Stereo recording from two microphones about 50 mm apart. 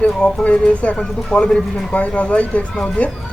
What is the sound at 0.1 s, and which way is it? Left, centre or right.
Speech, centre.